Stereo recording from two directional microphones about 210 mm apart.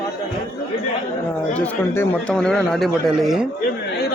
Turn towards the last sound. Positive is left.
turn(degrees=0)  # may be behind; listen again after turning